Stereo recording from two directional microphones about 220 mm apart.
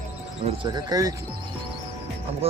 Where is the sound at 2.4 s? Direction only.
25° right (ahead or behind).